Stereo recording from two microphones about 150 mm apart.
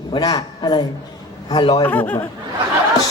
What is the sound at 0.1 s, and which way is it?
A man's voice, 25° left (ahead or behind).